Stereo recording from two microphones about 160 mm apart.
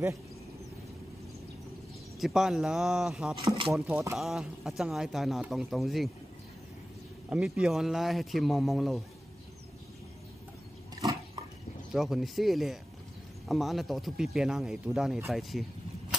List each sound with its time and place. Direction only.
2.1 s speech: centre (ahead or behind)
3.4 s speech: 40° right (ahead or behind)
3.8 s speech: 10° right (ahead or behind)
4.2 s speech: centre (ahead or behind)
7.2 s speech: 5° right (ahead or behind)
11.9 s speech: centre (ahead or behind)